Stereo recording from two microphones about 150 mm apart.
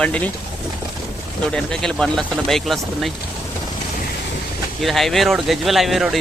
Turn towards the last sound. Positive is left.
turn(degrees=0)  # may be behind; listen again after turning